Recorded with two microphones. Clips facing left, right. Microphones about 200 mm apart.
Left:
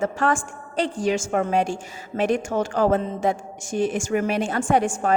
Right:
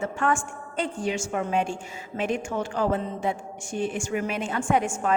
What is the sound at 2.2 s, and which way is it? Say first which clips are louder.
A man's voice: left 5 dB; 75° left (ahead or behind).